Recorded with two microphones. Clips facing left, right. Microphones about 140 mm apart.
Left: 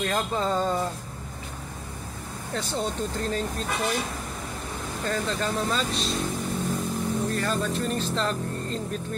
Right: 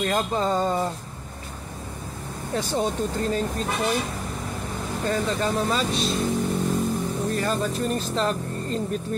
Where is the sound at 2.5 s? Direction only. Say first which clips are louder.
Right 4 dB; 15° right (ahead or behind).